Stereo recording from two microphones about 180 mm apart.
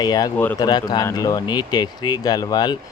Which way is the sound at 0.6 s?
20° left (ahead or behind).